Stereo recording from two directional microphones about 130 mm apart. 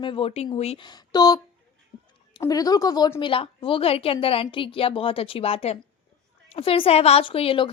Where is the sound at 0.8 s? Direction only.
35° left (ahead or behind).